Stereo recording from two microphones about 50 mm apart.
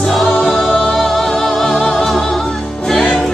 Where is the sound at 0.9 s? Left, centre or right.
Centre.